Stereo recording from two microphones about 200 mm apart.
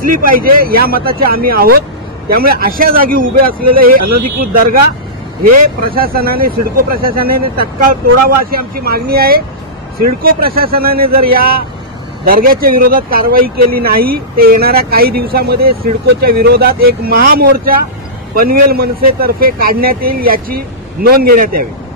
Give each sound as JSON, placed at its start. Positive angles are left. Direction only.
{"t": 0.0, "sound": "speech", "side_deg": -45}
{"t": 10.4, "sound": "speech", "side_deg": -50}